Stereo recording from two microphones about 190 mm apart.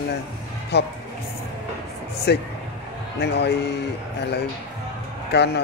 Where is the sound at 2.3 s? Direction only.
60° left (ahead or behind).